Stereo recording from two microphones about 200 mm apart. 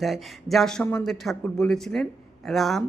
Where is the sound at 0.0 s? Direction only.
Centre (ahead or behind).